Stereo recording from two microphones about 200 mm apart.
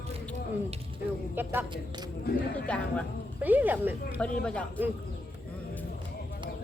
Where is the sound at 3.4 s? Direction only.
10° right (ahead or behind).